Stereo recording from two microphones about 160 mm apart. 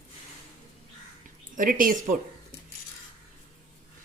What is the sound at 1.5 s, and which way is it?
Speech, 60° right (ahead or behind).